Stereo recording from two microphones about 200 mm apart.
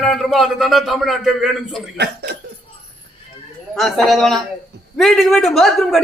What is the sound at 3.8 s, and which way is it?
Speech, centre (ahead or behind).